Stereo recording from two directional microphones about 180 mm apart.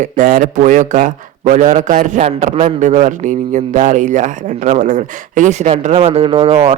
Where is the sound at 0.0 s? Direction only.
50° right (ahead or behind).